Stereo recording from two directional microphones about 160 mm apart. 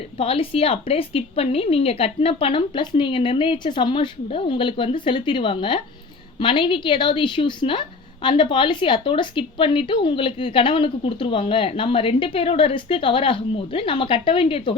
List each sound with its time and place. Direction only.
0.2 s a woman's voice: 35° left (ahead or behind)